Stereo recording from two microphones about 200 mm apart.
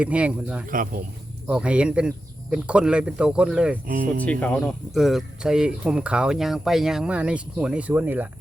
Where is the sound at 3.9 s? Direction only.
45° right (ahead or behind).